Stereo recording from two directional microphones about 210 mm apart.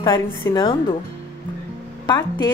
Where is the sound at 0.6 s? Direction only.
25° left (ahead or behind).